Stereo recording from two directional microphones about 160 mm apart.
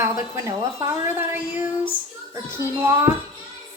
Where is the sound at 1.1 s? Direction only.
10° right (ahead or behind).